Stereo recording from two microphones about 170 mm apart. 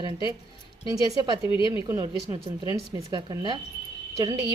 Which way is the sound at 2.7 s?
20° right (ahead or behind).